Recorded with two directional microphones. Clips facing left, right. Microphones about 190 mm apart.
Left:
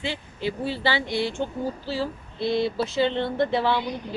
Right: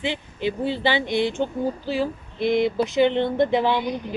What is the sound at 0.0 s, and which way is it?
Speech, 20° right (ahead or behind).